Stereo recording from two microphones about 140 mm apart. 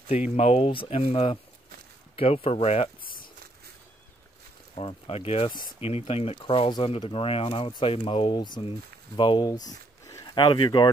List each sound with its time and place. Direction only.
0.4 s speech: 45° left (ahead or behind)
4.7 s speech: 40° left (ahead or behind)
9.7 s a sound: 25° left (ahead or behind)